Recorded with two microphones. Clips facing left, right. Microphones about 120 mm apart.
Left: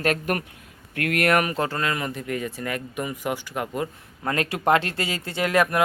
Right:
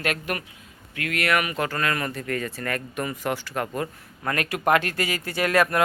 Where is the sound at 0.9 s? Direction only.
50° left (ahead or behind).